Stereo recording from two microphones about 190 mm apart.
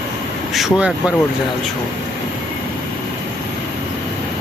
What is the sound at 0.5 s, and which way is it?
Speech, 5° right (ahead or behind).